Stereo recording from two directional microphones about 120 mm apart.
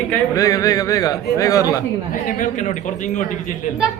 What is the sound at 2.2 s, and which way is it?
A man's voice, 90° left.